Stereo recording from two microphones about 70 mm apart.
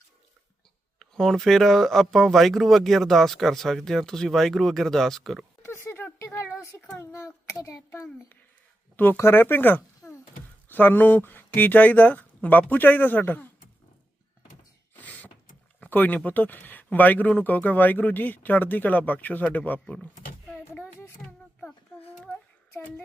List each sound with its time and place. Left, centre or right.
0.9 s speech: centre
5.6 s a sound: left
6.9 s a child's voice: left
9.1 s speech: left
14.9 s mechanisms: left
15.8 s speech: left